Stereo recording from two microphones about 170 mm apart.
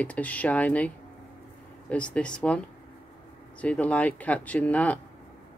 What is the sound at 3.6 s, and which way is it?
Speech, 10° left (ahead or behind).